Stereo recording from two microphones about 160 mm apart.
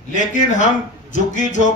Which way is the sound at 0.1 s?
50° left (ahead or behind).